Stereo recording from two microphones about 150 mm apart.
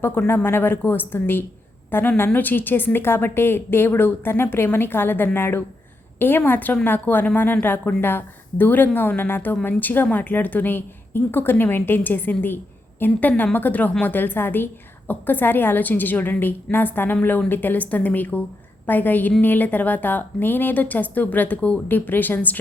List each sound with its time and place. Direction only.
0.0 s a woman's voice: 15° left (ahead or behind)